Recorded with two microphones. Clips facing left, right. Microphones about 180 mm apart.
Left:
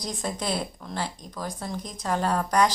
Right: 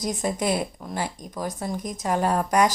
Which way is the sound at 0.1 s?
15° right (ahead or behind).